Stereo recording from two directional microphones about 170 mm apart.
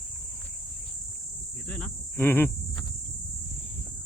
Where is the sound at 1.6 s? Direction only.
5° left (ahead or behind).